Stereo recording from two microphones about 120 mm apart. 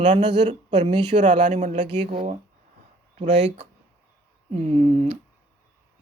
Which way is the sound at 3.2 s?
60° right (ahead or behind).